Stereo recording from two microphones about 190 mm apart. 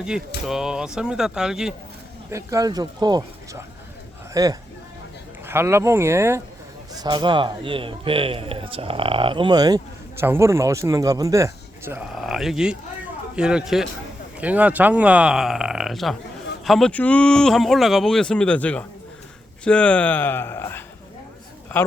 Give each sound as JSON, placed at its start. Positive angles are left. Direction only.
{"t": 0.4, "sound": "speech", "side_deg": -5}
{"t": 2.3, "sound": "a man's voice", "side_deg": -15}
{"t": 12.1, "sound": "speech", "side_deg": 0}